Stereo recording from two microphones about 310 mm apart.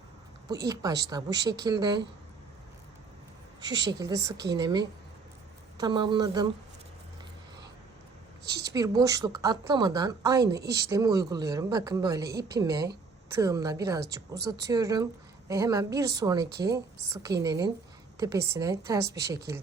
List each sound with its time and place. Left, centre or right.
0.7 s a woman's voice: centre
3.6 s a woman's voice: centre
8.4 s a sound: right
8.7 s a woman's voice: centre